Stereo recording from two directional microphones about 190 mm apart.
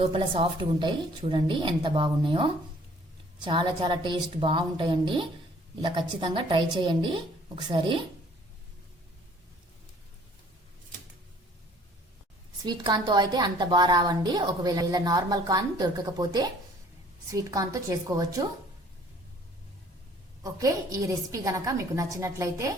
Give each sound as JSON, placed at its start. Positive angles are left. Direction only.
{"t": 0.0, "sound": "a woman's voice", "side_deg": -25}
{"t": 12.6, "sound": "a woman's voice", "side_deg": -20}
{"t": 20.4, "sound": "a woman's voice", "side_deg": -15}